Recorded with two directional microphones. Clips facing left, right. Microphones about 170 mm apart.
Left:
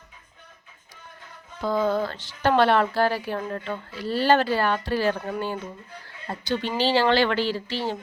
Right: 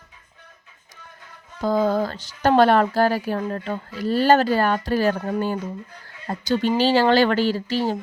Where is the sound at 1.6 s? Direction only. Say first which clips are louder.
Right 3 dB; 40° right (ahead or behind).